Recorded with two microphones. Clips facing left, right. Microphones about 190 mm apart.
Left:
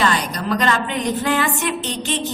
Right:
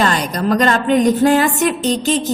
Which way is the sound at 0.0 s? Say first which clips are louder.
Right 4 dB; 45° right (ahead or behind).